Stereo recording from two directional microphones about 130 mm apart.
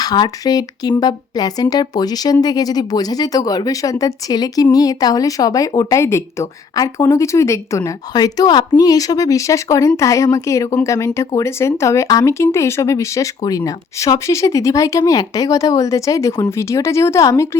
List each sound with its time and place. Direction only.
0.0 s speech: 30° left (ahead or behind)